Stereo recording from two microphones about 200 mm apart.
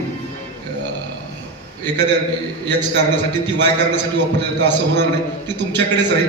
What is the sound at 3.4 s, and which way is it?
A man's voice, 60° right (ahead or behind).